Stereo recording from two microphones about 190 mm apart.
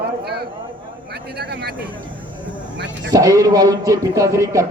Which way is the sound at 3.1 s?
15° right (ahead or behind).